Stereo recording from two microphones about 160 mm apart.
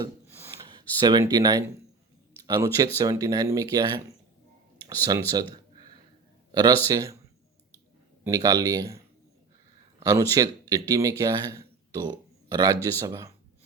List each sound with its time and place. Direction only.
0.0 s gasp: 20° right (ahead or behind)
0.7 s speech: 25° right (ahead or behind)
5.3 s a sound: 25° right (ahead or behind)
6.5 s speech: 25° right (ahead or behind)
8.2 s speech: 20° right (ahead or behind)
10.0 s speech: 20° right (ahead or behind)